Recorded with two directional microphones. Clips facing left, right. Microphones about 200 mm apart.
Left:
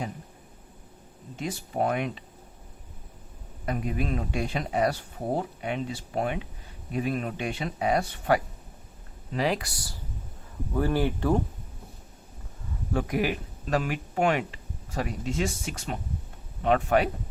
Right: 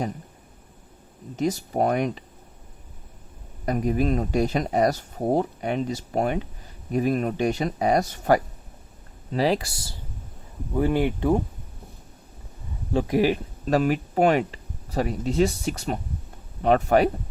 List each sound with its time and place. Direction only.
1.4 s speech: 40° right (ahead or behind)
3.7 s speech: 40° right (ahead or behind); by 11.3 s 20° right (ahead or behind)
12.9 s speech: 30° right (ahead or behind)